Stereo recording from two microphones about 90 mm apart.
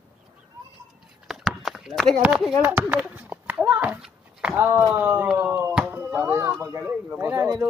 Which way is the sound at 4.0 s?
10° right (ahead or behind).